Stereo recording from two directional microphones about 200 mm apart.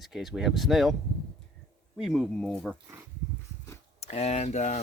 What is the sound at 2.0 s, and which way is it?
Speech, centre (ahead or behind).